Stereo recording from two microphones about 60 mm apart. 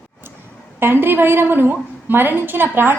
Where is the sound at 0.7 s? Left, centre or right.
Right.